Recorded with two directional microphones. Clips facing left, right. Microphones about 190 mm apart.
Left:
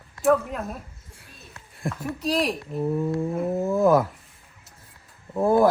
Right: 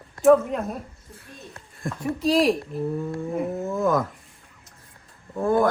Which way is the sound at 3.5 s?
35° left (ahead or behind).